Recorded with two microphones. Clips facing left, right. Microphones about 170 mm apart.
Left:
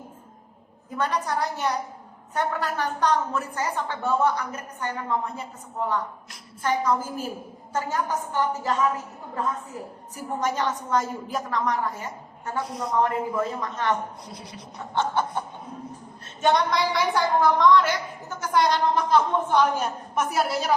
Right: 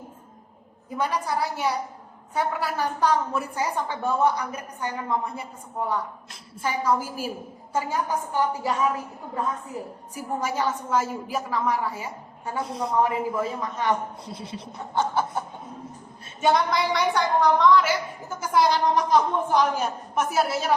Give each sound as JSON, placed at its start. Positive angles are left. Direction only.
{"t": 0.9, "sound": "a woman's voice", "side_deg": -10}
{"t": 6.6, "sound": "a woman's voice", "side_deg": -10}
{"t": 10.2, "sound": "a woman's voice", "side_deg": -10}
{"t": 12.7, "sound": "speech", "side_deg": -30}
{"t": 13.0, "sound": "a woman's voice", "side_deg": -10}
{"t": 14.3, "sound": "speech", "side_deg": -25}
{"t": 14.9, "sound": "snicker", "side_deg": -5}
{"t": 16.4, "sound": "a woman's voice", "side_deg": -5}